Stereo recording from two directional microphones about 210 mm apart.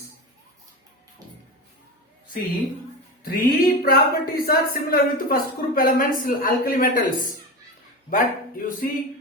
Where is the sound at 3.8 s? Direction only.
45° left (ahead or behind).